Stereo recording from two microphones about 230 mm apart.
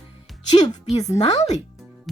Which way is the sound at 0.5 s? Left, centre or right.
Centre.